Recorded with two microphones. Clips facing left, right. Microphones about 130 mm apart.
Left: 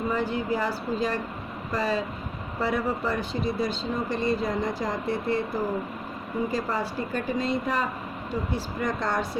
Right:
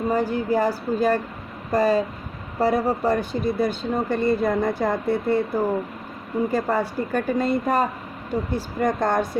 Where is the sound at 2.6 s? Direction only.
40° right (ahead or behind).